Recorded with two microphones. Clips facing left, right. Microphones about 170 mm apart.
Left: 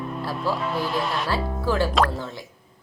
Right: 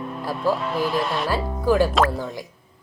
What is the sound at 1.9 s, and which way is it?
Speech, centre (ahead or behind).